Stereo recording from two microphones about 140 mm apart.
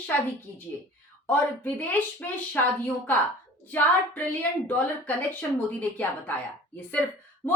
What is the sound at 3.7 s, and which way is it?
A woman's voice, 10° left (ahead or behind).